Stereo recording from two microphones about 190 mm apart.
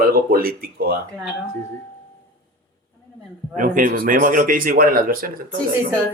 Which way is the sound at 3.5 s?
45° right (ahead or behind).